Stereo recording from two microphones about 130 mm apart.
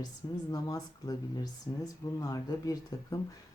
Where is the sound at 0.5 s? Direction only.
30° left (ahead or behind).